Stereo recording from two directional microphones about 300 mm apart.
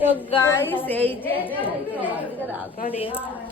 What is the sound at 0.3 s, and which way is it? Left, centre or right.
A woman's voice, centre.